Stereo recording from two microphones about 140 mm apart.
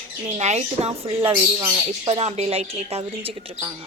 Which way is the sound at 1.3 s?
30° right (ahead or behind).